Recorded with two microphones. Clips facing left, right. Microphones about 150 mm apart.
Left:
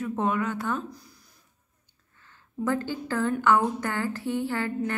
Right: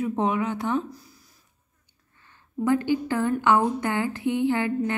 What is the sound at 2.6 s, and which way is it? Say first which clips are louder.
A woman's voice: right 6 dB; 15° right (ahead or behind).